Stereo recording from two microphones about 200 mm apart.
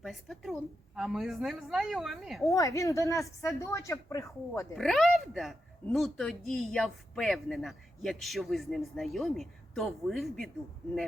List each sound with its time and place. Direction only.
0.0 s speech: centre (ahead or behind)
2.5 s a woman's voice: 15° left (ahead or behind)
4.7 s speech: centre (ahead or behind)